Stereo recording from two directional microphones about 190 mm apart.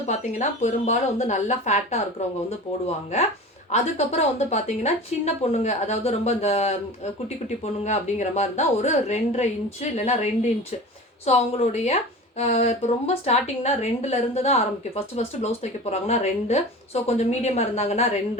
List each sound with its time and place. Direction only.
0.1 s a woman's voice: 40° left (ahead or behind)
3.7 s a woman's voice: 35° left (ahead or behind)
11.3 s a woman's voice: 35° left (ahead or behind)